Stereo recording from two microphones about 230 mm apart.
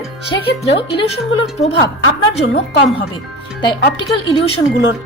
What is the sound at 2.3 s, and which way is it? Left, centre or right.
Speech, left.